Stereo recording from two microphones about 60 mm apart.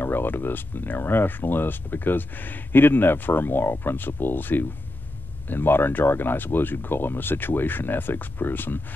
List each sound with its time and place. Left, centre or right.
0.0 s speech: left